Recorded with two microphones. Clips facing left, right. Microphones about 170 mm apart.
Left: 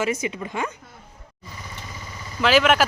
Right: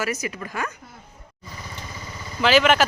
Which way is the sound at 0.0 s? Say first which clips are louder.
Left 3 dB; 20° left (ahead or behind).